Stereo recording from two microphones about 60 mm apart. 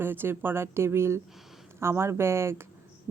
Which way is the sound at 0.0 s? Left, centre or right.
Right.